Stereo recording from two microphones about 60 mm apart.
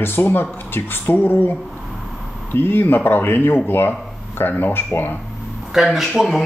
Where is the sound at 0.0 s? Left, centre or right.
Left.